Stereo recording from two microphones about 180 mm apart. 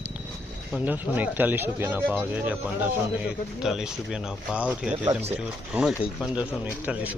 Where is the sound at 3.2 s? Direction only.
5° right (ahead or behind).